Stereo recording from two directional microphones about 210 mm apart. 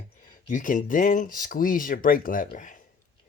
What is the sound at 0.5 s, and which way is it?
Speech, 40° left (ahead or behind).